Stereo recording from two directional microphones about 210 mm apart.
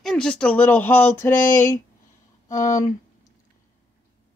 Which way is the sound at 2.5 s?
35° left (ahead or behind).